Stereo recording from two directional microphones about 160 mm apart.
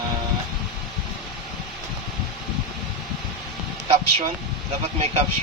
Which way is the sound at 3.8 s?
40° right (ahead or behind).